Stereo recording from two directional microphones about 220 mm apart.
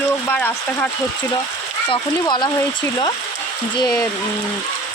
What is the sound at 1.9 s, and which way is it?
Speech, 20° left (ahead or behind).